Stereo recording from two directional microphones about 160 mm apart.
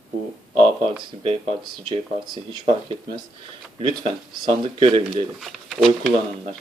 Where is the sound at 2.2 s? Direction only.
30° right (ahead or behind).